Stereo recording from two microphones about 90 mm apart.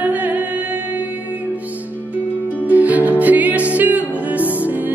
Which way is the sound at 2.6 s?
15° right (ahead or behind).